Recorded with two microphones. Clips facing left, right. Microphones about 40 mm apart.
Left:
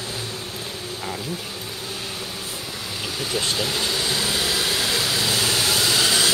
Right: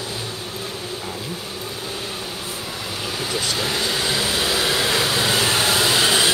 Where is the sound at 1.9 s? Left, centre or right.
Right.